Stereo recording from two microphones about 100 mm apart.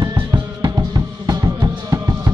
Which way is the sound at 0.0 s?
45° right (ahead or behind).